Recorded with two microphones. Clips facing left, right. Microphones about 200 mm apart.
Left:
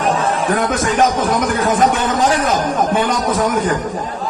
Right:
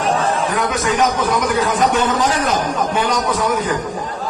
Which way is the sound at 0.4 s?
50° left (ahead or behind).